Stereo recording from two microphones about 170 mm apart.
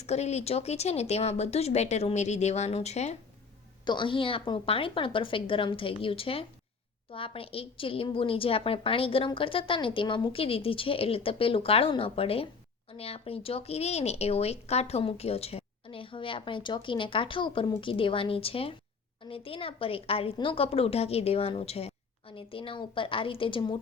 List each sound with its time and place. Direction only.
0.0 s speech: 40° left (ahead or behind)
3.8 s speech: 25° left (ahead or behind)